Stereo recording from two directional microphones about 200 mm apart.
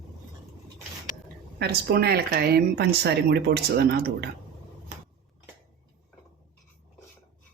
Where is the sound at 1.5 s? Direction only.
55° right (ahead or behind).